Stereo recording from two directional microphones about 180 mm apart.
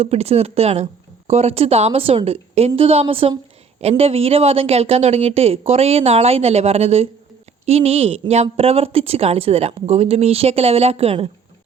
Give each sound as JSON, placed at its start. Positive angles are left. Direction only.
{"t": 0.0, "sound": "speech", "side_deg": -35}